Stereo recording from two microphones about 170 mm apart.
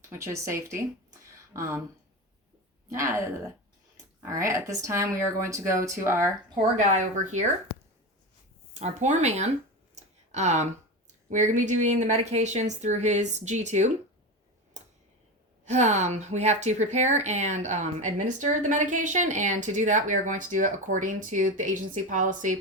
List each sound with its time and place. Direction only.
0.1 s a woman's voice: 15° right (ahead or behind)
2.9 s speech: 15° right (ahead or behind)
6.9 s a woman's voice: 45° right (ahead or behind)
8.7 s speech: 40° right (ahead or behind)
9.9 s a sound: 45° right (ahead or behind)
11.3 s a woman's voice: 45° right (ahead or behind)
14.8 s a sound: 45° right (ahead or behind)
15.6 s a woman's voice: 40° right (ahead or behind)